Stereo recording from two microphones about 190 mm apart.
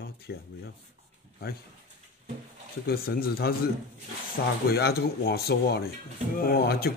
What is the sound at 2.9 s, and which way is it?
Speech, 55° left (ahead or behind).